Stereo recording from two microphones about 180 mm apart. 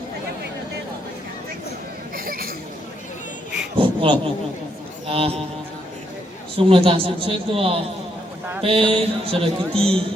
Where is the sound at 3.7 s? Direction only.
30° right (ahead or behind).